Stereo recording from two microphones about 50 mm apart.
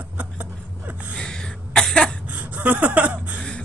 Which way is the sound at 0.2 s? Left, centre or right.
Right.